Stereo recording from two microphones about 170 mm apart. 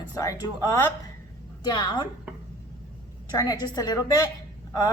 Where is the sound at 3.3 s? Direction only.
20° left (ahead or behind).